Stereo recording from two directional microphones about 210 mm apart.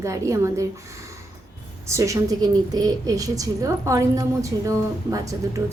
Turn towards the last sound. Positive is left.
turn(degrees=-15)  # may be behind; listen again after turning